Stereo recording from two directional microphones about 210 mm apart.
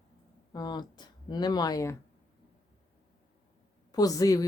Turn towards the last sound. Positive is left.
turn(degrees=15)  # may be behind; listen again after turning